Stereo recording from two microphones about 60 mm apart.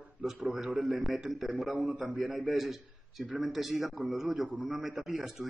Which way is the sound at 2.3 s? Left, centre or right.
Centre.